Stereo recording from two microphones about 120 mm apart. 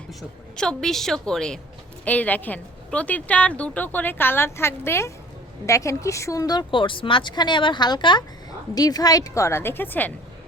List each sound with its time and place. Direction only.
0.1 s a woman's voice: 5° left (ahead or behind)